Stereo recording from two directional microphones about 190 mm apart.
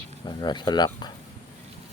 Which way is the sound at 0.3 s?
25° left (ahead or behind).